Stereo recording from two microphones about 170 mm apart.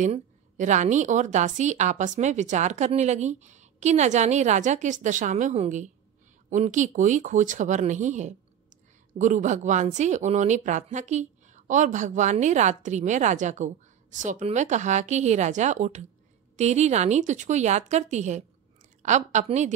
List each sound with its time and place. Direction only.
0.0 s a woman's voice: 45° right (ahead or behind)